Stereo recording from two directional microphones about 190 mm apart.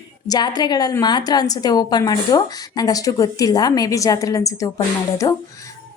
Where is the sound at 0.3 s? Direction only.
20° left (ahead or behind).